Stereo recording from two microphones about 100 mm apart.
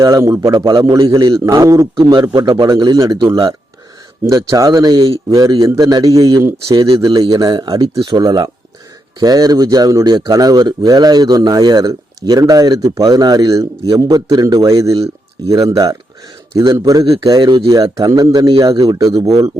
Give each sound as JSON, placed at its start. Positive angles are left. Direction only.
{"t": 0.0, "sound": "speech", "side_deg": -30}
{"t": 0.5, "sound": "a man's voice", "side_deg": -55}
{"t": 1.5, "sound": "speech", "side_deg": -35}
{"t": 14.9, "sound": "speech", "side_deg": -90}
{"t": 15.5, "sound": "speech", "side_deg": -35}